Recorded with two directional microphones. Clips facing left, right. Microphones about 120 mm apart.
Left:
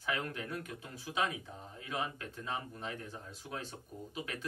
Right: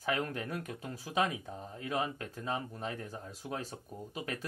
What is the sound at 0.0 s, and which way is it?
Speech, 40° right (ahead or behind).